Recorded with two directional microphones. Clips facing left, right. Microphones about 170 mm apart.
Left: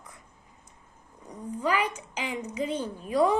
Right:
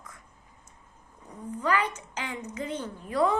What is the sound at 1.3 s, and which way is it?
A woman's voice, 10° left (ahead or behind).